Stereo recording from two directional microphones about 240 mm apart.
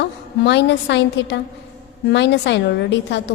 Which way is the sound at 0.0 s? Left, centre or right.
Left.